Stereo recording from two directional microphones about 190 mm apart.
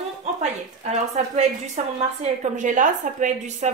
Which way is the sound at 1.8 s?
40° right (ahead or behind).